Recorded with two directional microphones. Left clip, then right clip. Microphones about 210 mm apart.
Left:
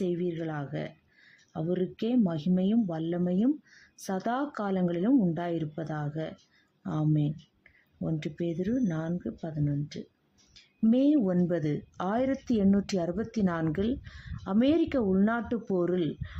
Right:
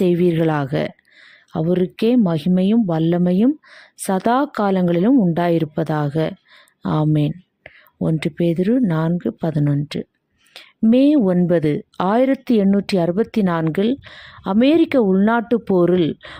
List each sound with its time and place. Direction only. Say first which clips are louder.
0.0 s speech: right 15 dB; 50° right (ahead or behind)